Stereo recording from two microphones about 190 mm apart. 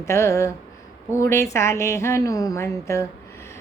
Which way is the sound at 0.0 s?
15° left (ahead or behind).